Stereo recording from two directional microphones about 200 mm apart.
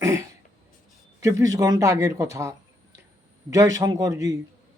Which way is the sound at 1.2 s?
15° right (ahead or behind).